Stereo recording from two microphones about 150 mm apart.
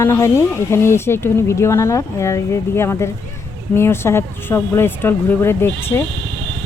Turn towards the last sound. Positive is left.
turn(degrees=15)  # may be behind; listen again after turning